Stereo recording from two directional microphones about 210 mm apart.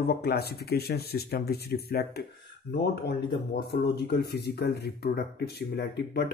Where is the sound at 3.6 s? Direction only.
50° left (ahead or behind).